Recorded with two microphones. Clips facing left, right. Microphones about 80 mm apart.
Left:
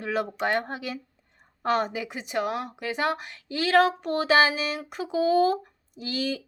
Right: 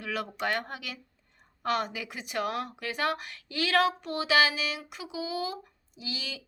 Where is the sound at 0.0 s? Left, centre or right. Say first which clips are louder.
Left 5 dB; left.